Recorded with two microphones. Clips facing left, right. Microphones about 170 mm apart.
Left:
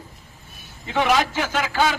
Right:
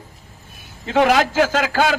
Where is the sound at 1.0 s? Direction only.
60° right (ahead or behind).